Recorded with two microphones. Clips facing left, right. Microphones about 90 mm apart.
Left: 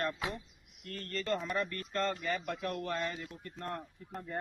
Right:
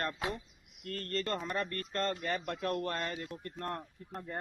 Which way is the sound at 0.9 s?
55° right (ahead or behind).